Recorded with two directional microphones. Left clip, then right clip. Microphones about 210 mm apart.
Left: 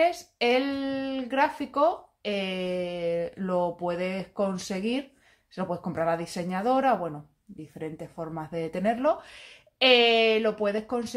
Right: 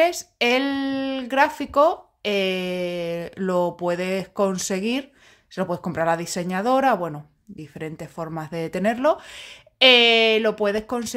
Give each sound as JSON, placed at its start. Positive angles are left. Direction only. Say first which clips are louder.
{"t": 0.0, "sound": "speech", "louder": "right 4 dB", "side_deg": -40}